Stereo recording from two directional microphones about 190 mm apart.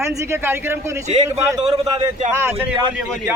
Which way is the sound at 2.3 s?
15° right (ahead or behind).